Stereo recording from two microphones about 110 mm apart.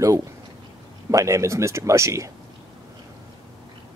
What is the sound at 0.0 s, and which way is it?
Speech, 30° right (ahead or behind).